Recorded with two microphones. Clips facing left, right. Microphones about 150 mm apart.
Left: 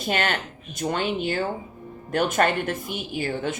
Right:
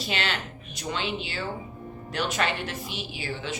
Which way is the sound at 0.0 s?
50° left (ahead or behind).